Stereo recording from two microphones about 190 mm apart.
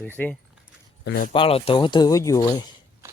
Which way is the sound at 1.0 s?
60° left (ahead or behind).